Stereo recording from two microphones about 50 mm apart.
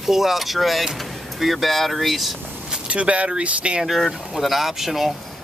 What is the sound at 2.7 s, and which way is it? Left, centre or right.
Speech, right.